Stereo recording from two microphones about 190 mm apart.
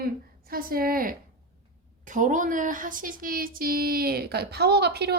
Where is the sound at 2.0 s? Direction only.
40° right (ahead or behind).